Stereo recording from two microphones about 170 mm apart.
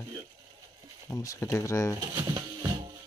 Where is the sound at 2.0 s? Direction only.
20° right (ahead or behind).